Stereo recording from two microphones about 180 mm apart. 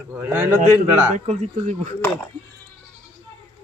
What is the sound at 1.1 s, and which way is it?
Speech, 40° right (ahead or behind).